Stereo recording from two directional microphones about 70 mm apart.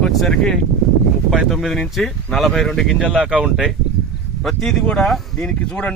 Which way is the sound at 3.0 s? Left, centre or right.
Centre.